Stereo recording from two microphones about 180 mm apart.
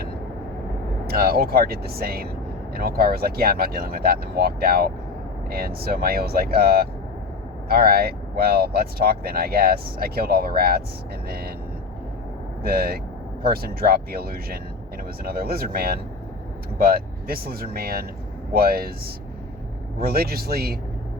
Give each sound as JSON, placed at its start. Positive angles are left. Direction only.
{"t": 1.0, "sound": "speech", "side_deg": -55}
{"t": 12.6, "sound": "speech", "side_deg": -55}